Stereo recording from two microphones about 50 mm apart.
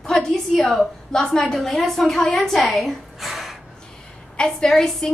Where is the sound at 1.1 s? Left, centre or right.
Centre.